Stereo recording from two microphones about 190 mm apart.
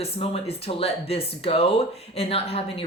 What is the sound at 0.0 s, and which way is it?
A woman's voice, 30° left (ahead or behind).